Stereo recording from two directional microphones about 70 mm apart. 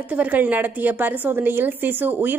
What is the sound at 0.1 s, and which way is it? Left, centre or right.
Speech, right.